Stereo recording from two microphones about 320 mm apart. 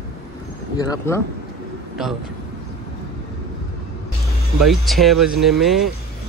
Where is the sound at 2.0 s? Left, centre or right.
Centre.